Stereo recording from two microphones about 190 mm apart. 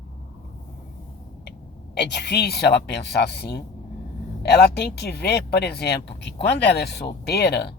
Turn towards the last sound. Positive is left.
turn(degrees=60)  # may be behind; listen again after turning